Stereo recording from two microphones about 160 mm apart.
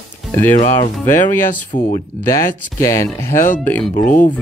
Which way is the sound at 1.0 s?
15° left (ahead or behind).